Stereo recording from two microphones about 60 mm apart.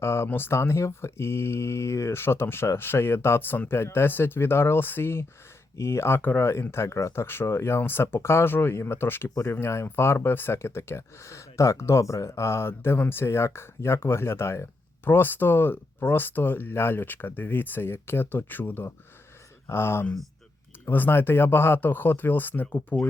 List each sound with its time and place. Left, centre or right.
0.0 s speech: left
5.7 s speech: left